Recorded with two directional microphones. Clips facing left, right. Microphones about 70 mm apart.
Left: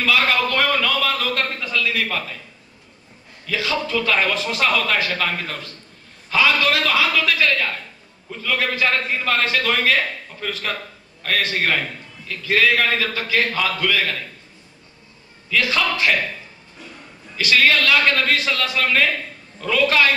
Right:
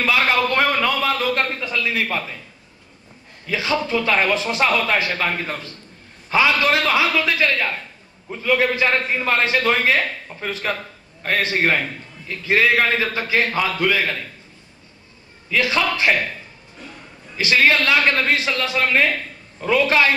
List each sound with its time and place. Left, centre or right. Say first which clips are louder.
0.0 s a sound: right 1 dB; right
3.4 s a man's voice: right 1 dB; right
15.5 s a man's voice: right 1 dB; right
17.4 s a man's voice: even; right